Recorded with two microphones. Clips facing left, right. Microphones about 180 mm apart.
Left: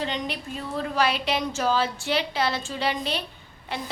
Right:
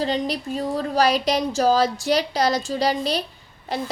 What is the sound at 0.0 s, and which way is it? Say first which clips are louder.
Speech: right 6 dB; 35° right (ahead or behind).